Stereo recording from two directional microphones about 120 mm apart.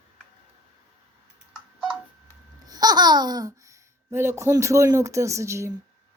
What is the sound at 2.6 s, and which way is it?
Speech, 35° right (ahead or behind).